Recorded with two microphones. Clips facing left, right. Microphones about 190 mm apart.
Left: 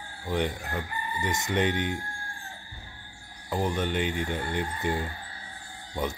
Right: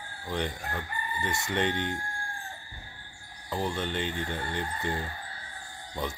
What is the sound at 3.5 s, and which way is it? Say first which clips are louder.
Speech: left 3 dB; 15° left (ahead or behind).